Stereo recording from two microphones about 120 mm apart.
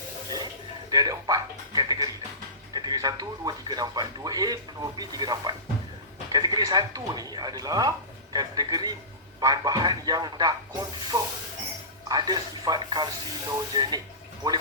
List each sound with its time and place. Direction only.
0.9 s speech: 35° right (ahead or behind)